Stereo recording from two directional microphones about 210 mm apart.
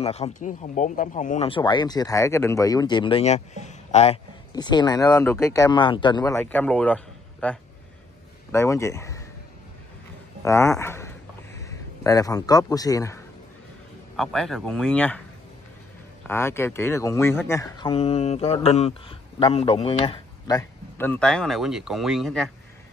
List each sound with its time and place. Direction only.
0.0 s speech: 30° left (ahead or behind); by 9.2 s 15° left (ahead or behind)
10.4 s a sound: 15° left (ahead or behind)
14.1 s speech: centre (ahead or behind)
16.3 s speech: 10° left (ahead or behind)
21.1 s speech: 5° left (ahead or behind)